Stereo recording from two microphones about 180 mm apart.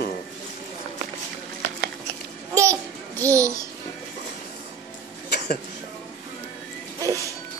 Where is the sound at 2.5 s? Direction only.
15° right (ahead or behind).